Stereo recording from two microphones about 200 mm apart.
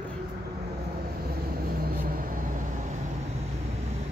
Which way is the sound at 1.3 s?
50° right (ahead or behind).